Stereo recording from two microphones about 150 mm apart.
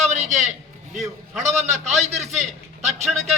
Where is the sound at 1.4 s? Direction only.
50° right (ahead or behind).